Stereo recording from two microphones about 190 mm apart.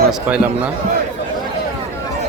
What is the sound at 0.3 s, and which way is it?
Speech, 5° right (ahead or behind).